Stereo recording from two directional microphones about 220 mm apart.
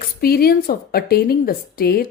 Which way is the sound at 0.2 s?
45° left (ahead or behind).